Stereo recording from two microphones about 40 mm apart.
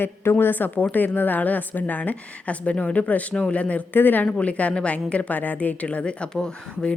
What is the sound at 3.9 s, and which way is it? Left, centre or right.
Speech, left.